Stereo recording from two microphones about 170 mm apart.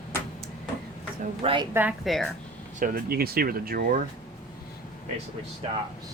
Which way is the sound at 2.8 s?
60° right (ahead or behind).